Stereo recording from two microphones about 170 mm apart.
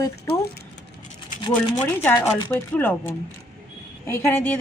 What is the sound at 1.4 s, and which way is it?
Speech, 25° left (ahead or behind).